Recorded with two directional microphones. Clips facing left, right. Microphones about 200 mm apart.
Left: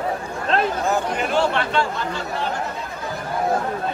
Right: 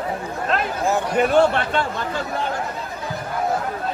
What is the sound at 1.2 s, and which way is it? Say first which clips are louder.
Speech: right 4 dB; 50° right (ahead or behind).